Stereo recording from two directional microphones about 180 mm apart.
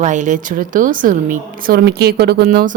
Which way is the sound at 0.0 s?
45° right (ahead or behind).